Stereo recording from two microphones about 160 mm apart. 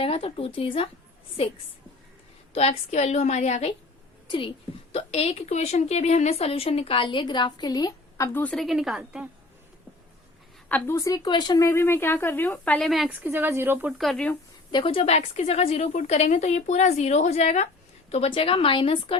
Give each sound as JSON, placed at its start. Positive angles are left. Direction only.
{"t": 0.0, "sound": "a woman's voice", "side_deg": 35}
{"t": 4.3, "sound": "a woman's voice", "side_deg": 30}
{"t": 10.7, "sound": "speech", "side_deg": 10}
{"t": 14.0, "sound": "speech", "side_deg": 0}
{"t": 14.7, "sound": "a woman's voice", "side_deg": 35}